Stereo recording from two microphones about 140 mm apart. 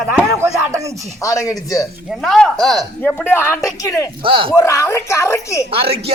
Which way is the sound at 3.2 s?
15° left (ahead or behind).